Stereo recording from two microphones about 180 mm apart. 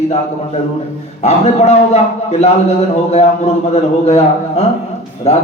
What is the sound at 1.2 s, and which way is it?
A man's voice, 35° left (ahead or behind).